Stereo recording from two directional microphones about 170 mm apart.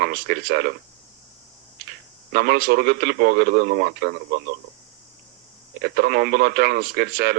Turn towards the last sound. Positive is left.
turn(degrees=-65)  # may be behind; listen again after turning